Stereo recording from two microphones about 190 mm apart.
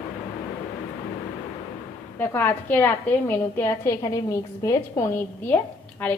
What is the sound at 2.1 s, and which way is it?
A woman's voice, 10° left (ahead or behind).